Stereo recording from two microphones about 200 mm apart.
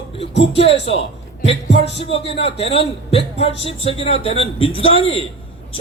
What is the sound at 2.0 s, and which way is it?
A man's voice, 30° left (ahead or behind).